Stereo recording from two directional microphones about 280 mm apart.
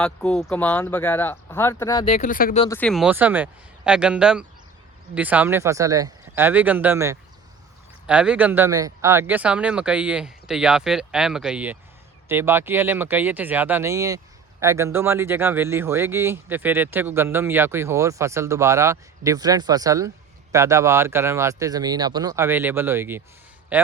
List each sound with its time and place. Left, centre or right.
0.0 s speech: centre
2.1 s speech: left
2.6 s speech: centre